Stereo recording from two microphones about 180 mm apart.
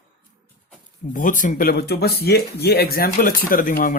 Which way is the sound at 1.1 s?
45° left (ahead or behind).